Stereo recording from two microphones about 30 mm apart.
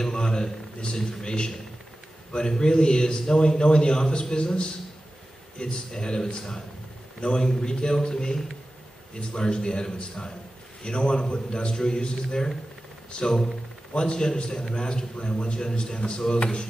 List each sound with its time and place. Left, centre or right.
0.0 s a sound: left
0.9 s a man's voice: left
5.9 s a man's voice: left
13.9 s a man's voice: left